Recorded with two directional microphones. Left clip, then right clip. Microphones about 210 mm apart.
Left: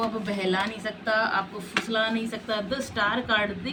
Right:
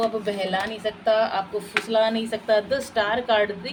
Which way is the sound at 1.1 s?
30° right (ahead or behind).